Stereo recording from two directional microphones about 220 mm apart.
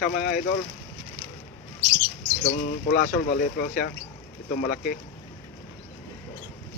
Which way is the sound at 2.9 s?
40° left (ahead or behind).